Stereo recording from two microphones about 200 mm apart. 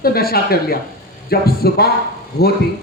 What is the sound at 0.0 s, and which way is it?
Speech, 50° left (ahead or behind).